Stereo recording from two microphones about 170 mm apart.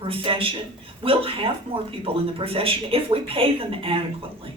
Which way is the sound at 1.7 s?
30° right (ahead or behind).